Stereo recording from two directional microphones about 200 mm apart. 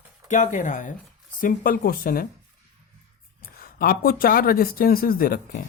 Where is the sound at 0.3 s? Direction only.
40° left (ahead or behind).